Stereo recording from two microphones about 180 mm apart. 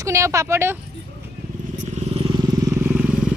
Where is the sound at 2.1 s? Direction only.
30° right (ahead or behind).